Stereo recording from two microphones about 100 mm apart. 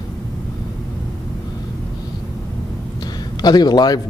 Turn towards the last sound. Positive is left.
turn(degrees=45)  # may be behind; listen again after turning